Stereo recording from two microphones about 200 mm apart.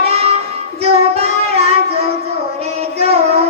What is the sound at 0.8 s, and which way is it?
Child singing, 30° right (ahead or behind).